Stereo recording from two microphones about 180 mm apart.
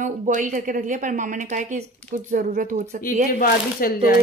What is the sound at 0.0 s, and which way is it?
Speech, 45° right (ahead or behind).